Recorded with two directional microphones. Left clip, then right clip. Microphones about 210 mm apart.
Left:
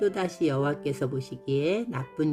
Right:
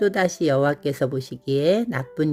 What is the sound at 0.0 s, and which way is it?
Speech, 30° right (ahead or behind).